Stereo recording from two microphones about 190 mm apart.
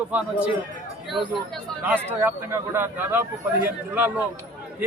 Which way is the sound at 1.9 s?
10° right (ahead or behind).